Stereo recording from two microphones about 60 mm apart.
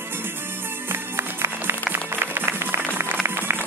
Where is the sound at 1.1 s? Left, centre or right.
Right.